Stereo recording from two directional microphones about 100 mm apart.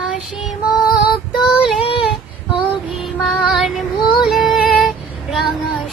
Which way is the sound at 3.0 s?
Centre (ahead or behind).